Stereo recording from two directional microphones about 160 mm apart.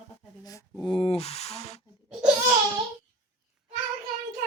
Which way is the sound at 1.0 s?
40° left (ahead or behind).